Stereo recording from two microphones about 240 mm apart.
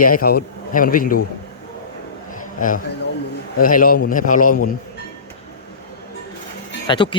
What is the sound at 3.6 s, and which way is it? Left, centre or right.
Speech, left.